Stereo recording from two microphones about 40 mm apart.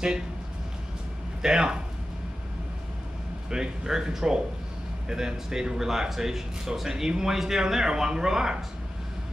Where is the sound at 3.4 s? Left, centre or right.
Centre.